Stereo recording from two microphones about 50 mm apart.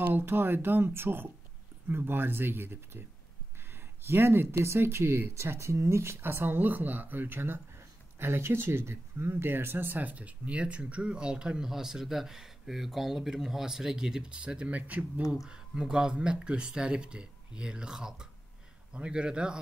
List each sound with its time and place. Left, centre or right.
0.0 s speech: right
15.4 s speech: centre